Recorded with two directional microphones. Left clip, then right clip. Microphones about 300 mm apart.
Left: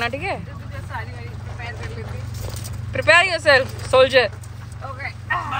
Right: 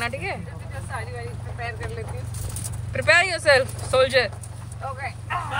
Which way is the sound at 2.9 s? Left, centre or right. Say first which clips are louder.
Left 4 dB; centre.